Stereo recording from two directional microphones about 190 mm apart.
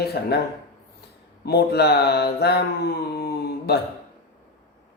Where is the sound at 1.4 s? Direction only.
60° left (ahead or behind).